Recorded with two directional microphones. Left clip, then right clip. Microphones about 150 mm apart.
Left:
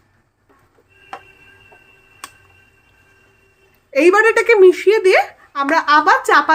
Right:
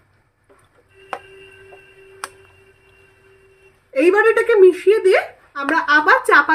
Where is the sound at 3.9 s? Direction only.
65° left (ahead or behind).